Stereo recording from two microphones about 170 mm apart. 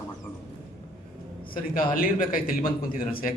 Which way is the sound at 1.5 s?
55° left (ahead or behind).